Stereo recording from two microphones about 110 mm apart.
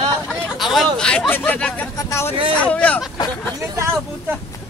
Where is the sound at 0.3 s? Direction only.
Centre (ahead or behind).